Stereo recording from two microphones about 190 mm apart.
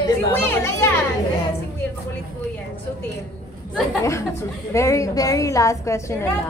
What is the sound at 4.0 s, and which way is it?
A woman's voice, 15° left (ahead or behind).